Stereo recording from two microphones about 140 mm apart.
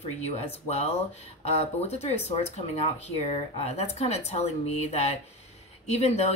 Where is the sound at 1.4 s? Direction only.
50° left (ahead or behind).